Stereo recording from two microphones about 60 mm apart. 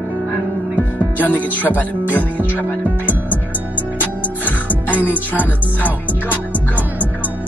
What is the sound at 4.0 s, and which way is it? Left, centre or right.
Music, left.